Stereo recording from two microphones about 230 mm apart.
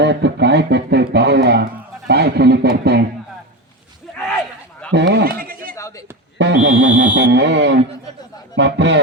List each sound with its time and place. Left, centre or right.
0.0 s speech: right
4.9 s a sound: right
6.4 s speech: right